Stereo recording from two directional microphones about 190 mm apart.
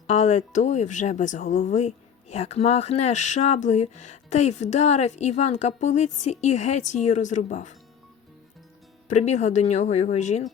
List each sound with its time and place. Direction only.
0.1 s speech: 35° left (ahead or behind)
9.0 s speech: 40° left (ahead or behind)